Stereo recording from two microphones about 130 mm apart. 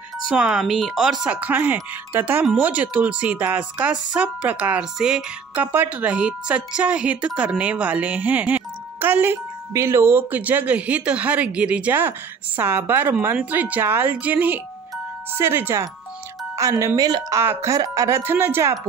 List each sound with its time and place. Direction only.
0.2 s speech: 5° right (ahead or behind); by 18.8 s 20° right (ahead or behind)